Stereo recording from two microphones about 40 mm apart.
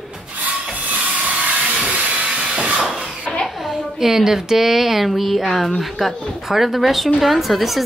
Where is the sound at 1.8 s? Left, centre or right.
Centre.